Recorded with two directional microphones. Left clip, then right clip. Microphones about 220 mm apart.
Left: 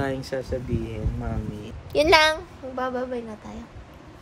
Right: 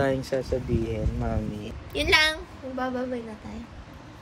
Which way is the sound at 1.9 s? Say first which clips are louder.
Left 4 dB; 25° left (ahead or behind).